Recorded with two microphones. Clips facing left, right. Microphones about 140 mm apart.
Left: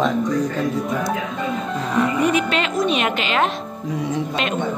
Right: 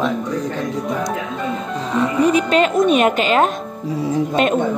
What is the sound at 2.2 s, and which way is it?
Speech, 40° right (ahead or behind).